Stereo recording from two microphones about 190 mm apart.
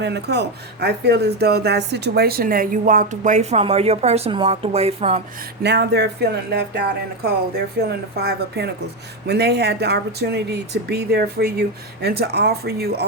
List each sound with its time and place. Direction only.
0.0 s speech: 60° right (ahead or behind); by 5.2 s 30° right (ahead or behind)
5.6 s speech: 60° right (ahead or behind)